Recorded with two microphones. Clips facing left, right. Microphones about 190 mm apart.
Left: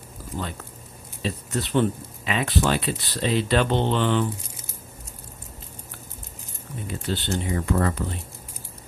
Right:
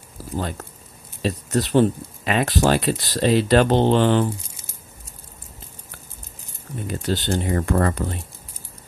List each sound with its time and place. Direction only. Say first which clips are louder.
0.4 s speech: right 5 dB; 40° right (ahead or behind)
7.1 s speech: right 4 dB; 40° right (ahead or behind)